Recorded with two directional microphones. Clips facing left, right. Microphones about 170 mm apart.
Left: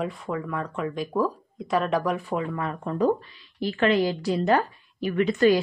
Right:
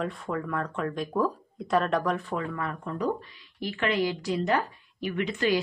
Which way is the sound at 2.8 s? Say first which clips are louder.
Left 8 dB; 30° left (ahead or behind).